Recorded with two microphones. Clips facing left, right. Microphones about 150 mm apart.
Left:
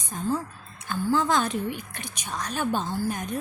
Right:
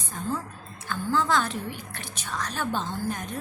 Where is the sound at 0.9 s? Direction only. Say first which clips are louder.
Left 2 dB; 15° left (ahead or behind).